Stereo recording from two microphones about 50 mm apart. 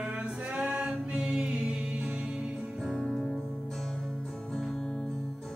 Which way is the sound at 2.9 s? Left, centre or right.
Centre.